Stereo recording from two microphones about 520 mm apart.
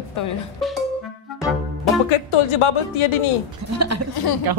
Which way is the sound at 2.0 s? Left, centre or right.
Left.